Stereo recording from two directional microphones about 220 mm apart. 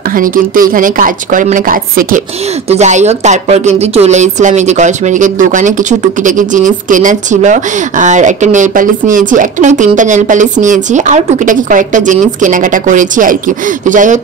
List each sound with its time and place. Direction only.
0.1 s a woman's voice: 40° right (ahead or behind)